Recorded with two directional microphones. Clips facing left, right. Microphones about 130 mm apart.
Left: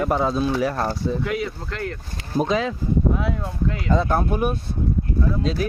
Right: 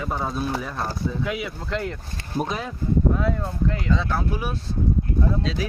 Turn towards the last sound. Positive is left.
turn(degrees=50)  # may be behind; listen again after turning